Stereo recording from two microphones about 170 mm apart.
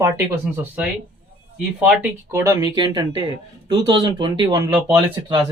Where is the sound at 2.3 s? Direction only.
15° right (ahead or behind).